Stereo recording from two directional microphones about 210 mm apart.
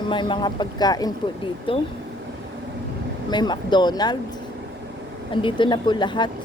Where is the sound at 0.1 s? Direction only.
20° left (ahead or behind).